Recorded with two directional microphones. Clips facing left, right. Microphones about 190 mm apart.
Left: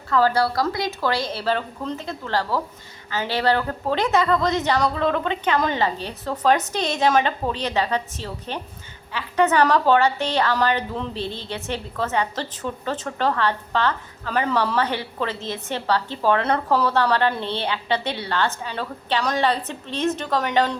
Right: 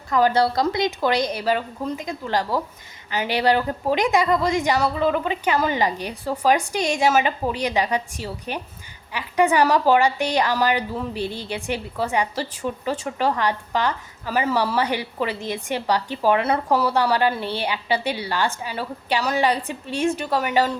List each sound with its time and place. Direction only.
0.1 s a woman's voice: 15° right (ahead or behind)